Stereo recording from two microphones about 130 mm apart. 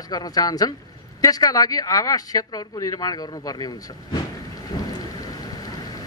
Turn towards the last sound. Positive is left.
turn(degrees=30)  # may be behind; listen again after turning